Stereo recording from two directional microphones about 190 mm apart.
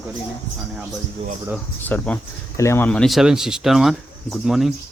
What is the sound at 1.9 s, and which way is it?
Speech, 10° left (ahead or behind).